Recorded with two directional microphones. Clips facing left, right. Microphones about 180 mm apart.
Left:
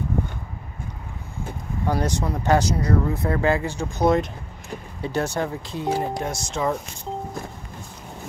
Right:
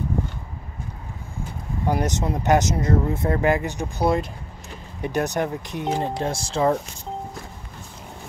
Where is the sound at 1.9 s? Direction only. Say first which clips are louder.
Right 1 dB; 20° right (ahead or behind).